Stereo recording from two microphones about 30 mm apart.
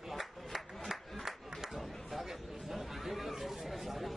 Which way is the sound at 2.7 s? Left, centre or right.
Centre.